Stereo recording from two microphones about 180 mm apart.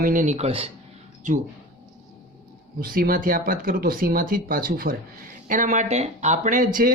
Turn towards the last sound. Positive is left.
turn(degrees=-50)  # may be behind; listen again after turning